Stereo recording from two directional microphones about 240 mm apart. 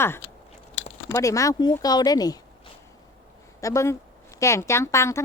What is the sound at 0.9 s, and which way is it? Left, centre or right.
Speech, centre.